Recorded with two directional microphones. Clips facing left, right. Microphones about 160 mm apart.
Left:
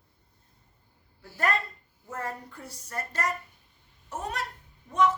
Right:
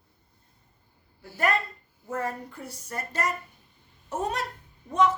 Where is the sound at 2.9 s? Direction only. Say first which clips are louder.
Right 2 dB; 20° right (ahead or behind).